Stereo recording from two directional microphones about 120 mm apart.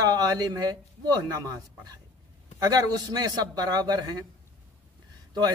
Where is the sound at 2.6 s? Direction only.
30° right (ahead or behind).